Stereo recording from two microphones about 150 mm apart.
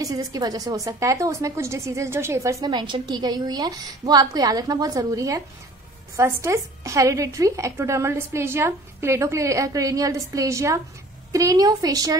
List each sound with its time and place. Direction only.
0.0 s speech: 25° right (ahead or behind)